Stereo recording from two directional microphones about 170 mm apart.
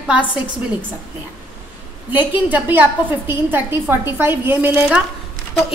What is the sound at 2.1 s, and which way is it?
A woman's voice, 10° right (ahead or behind).